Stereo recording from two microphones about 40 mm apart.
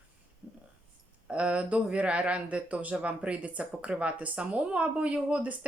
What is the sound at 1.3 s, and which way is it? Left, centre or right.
Speech, right.